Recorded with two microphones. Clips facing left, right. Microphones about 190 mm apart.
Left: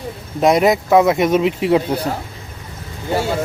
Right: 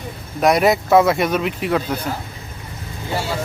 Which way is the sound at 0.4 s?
20° left (ahead or behind).